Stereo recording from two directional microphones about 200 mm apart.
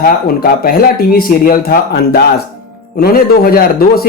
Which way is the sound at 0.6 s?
50° left (ahead or behind).